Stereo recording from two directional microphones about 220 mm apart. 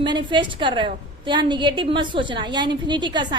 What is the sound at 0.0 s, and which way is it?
A woman's voice, 20° right (ahead or behind).